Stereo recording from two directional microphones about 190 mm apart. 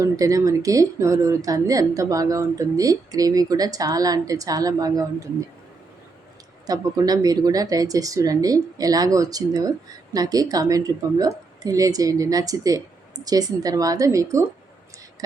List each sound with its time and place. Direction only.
0.0 s speech: 15° right (ahead or behind)
6.7 s speech: 20° right (ahead or behind)